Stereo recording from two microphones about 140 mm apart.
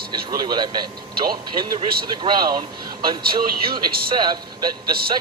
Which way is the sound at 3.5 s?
90° right.